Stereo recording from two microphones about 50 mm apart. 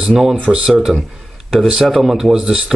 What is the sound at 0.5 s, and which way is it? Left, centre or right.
A man's voice, centre.